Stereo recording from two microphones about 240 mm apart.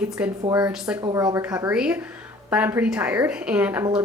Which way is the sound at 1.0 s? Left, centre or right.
Centre.